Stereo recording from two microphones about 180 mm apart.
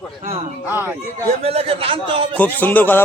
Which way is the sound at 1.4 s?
35° right (ahead or behind).